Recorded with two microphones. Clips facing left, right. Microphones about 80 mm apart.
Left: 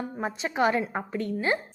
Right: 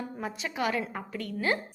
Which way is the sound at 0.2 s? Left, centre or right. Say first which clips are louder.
Left 7 dB; left.